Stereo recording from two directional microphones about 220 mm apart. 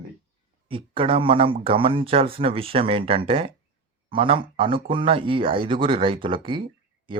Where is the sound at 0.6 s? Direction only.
25° right (ahead or behind).